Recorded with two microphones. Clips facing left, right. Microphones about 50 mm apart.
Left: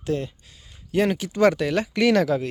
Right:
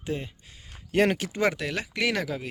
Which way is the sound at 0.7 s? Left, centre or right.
Right.